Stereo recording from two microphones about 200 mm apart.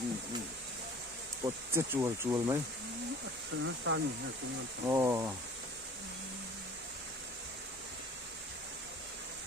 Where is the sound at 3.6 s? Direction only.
75° right (ahead or behind).